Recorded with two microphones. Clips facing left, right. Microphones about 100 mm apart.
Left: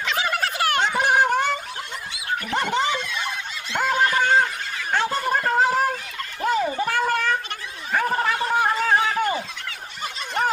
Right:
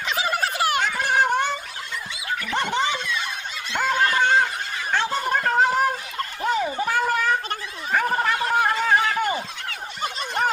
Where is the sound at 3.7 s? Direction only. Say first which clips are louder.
Left 1 dB; 5° left (ahead or behind).